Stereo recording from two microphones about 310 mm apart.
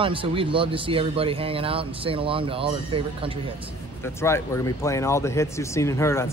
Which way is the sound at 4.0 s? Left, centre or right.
Centre.